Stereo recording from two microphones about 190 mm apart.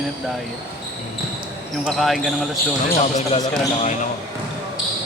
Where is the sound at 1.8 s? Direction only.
Centre (ahead or behind).